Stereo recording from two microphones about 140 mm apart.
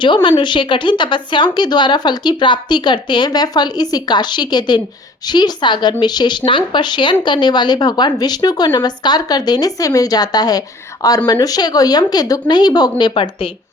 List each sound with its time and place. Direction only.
0.0 s a woman's voice: 35° left (ahead or behind)